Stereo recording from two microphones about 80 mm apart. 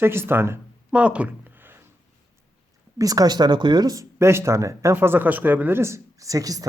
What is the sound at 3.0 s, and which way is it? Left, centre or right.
Speech, right.